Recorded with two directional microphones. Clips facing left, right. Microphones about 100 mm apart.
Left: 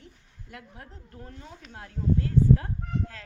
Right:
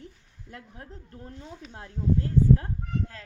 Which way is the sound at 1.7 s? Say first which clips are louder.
Even; 35° right (ahead or behind).